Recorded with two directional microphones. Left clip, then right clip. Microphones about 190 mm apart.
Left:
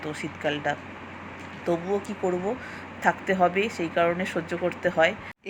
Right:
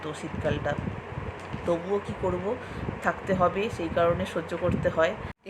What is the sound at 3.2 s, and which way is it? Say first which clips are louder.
Speech: left 2 dB; 10° left (ahead or behind).